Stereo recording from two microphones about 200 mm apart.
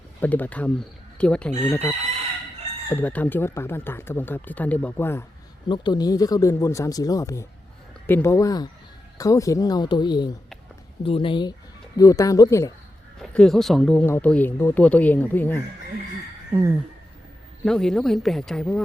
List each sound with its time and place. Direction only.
0.2 s a woman's voice: 10° left (ahead or behind)
2.9 s speech: 10° left (ahead or behind)
5.6 s speech: 20° left (ahead or behind)
13.3 s speech: centre (ahead or behind)
16.5 s a sound: 15° right (ahead or behind)
17.7 s a woman's voice: centre (ahead or behind)